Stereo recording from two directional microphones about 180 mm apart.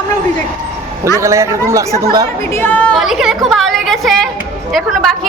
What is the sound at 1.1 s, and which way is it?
Speech, 15° right (ahead or behind).